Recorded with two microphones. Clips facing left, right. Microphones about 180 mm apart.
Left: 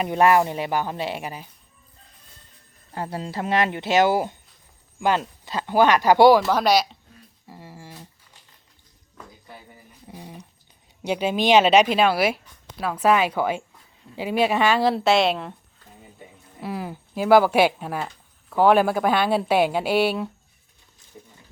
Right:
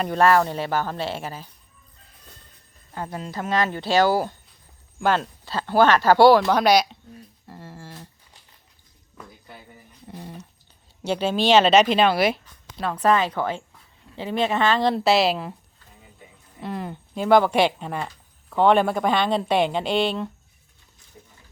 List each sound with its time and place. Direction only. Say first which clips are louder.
0.0 s speech: even; 15° left (ahead or behind)
2.9 s speech: left 2 dB; 30° left (ahead or behind)
4.9 s speech: even; 10° left (ahead or behind)
6.4 s speech: right 1 dB; centre (ahead or behind)
10.1 s speech: right 2 dB; 10° left (ahead or behind)
16.6 s speech: even; 5° left (ahead or behind)